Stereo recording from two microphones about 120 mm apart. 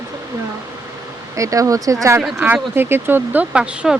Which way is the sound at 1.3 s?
25° right (ahead or behind).